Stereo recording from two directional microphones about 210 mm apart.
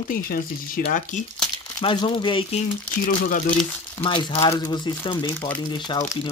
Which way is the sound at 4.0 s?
25° left (ahead or behind).